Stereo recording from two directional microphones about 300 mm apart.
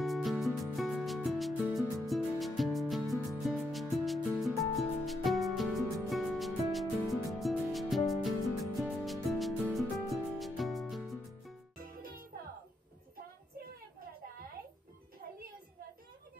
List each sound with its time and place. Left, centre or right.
0.0 s music: centre
11.8 s music: right